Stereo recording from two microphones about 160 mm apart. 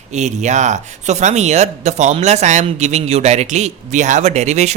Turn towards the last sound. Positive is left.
turn(degrees=-45)  # may be behind; listen again after turning